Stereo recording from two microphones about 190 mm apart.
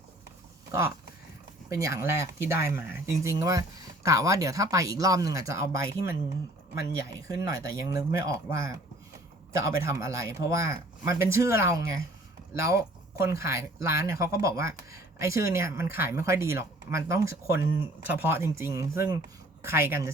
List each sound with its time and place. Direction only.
1.7 s speech: 15° right (ahead or behind)